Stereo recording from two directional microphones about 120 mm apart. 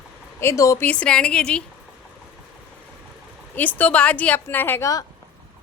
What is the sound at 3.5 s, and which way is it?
A woman's voice, 15° left (ahead or behind).